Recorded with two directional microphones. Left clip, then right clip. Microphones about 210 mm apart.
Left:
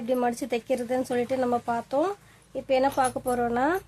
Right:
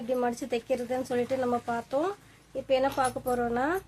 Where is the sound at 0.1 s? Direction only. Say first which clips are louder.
Left 3 dB; 35° left (ahead or behind).